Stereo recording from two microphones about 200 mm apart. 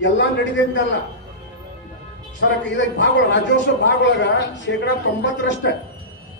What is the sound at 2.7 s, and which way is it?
A man's voice, 65° left (ahead or behind).